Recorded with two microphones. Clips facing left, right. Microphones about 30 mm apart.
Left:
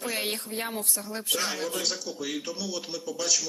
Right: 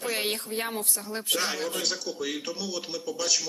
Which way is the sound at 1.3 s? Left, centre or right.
Right.